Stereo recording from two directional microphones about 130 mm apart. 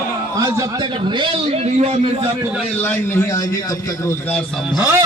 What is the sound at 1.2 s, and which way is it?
Speech, 50° right (ahead or behind).